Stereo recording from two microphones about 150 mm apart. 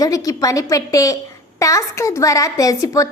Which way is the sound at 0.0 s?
20° left (ahead or behind).